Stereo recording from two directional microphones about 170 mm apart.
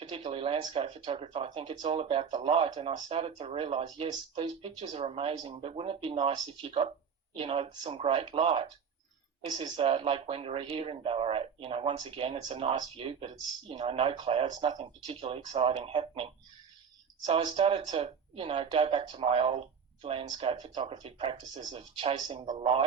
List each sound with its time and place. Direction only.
0.3 s speech: 35° right (ahead or behind)
21.8 s speech: 35° right (ahead or behind)